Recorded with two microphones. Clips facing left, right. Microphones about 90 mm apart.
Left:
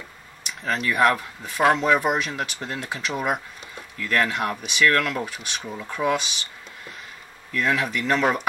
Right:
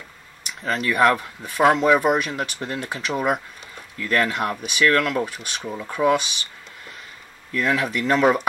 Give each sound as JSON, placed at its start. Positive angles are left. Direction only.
{"t": 0.5, "sound": "speech", "side_deg": 0}
{"t": 7.5, "sound": "speech", "side_deg": 0}